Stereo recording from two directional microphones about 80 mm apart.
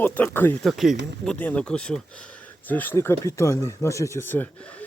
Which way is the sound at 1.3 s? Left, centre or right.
Centre.